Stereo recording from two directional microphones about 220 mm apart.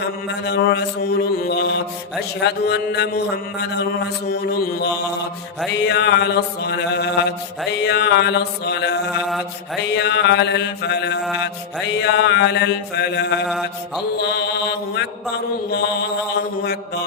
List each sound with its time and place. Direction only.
0.4 s mantra: 50° left (ahead or behind)
4.6 s mantra: 50° left (ahead or behind)
9.1 s a sound: centre (ahead or behind)
9.9 s mantra: 50° left (ahead or behind)